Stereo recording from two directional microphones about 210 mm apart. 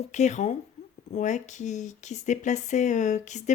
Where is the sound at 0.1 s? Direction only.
35° left (ahead or behind).